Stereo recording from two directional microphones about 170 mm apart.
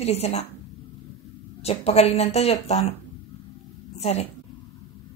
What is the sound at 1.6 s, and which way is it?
Speech, 35° left (ahead or behind).